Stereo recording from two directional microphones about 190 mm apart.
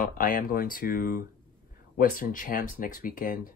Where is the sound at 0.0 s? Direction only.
45° left (ahead or behind).